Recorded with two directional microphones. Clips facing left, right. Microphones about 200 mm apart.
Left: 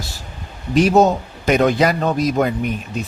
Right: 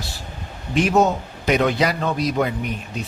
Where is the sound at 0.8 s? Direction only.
35° left (ahead or behind).